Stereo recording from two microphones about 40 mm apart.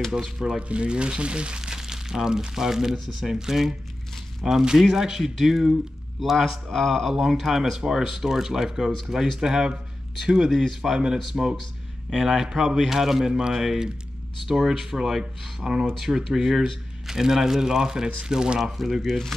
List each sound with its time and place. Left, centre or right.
0.2 s speech: centre
0.7 s speech: right
1.6 s speech: centre
6.3 s speech: centre
7.3 s speech: centre
10.5 s speech: centre; by 18.6 s right
18.6 s speech: centre